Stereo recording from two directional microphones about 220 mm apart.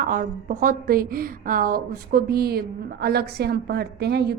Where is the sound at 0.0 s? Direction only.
40° right (ahead or behind).